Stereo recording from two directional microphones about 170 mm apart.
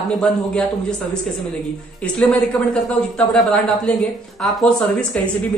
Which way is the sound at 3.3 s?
Centre (ahead or behind).